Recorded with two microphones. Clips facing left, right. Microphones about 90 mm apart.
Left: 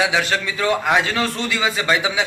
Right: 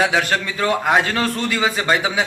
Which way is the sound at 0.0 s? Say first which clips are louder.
Right 1 dB; 45° right (ahead or behind).